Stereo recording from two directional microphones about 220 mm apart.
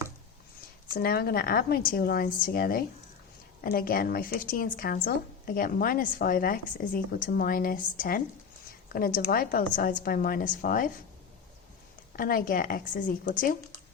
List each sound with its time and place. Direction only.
0.9 s a woman's voice: 45° left (ahead or behind)
12.1 s a woman's voice: 40° left (ahead or behind)